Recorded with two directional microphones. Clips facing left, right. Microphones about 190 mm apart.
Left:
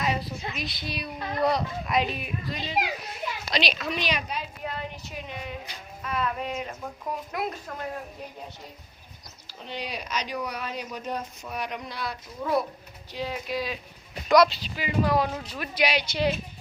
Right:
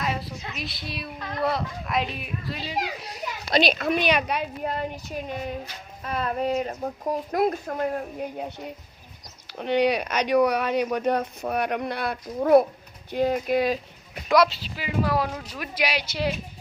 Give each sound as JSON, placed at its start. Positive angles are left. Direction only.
{"t": 0.0, "sound": "a woman's voice", "side_deg": 0}
{"t": 3.0, "sound": "a child's voice", "side_deg": -40}
{"t": 4.6, "sound": "a child's voice", "side_deg": -45}
{"t": 9.6, "sound": "a child's voice", "side_deg": -65}
{"t": 14.3, "sound": "speech", "side_deg": 0}